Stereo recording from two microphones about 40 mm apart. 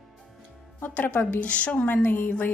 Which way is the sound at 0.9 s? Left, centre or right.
Left.